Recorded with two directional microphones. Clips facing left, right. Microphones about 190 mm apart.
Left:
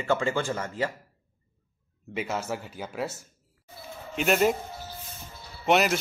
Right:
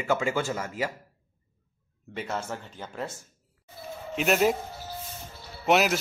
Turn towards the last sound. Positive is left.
turn(degrees=0)  # may be behind; listen again after turning